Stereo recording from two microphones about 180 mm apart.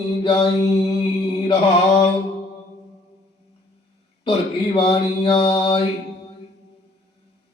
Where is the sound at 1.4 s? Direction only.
30° left (ahead or behind).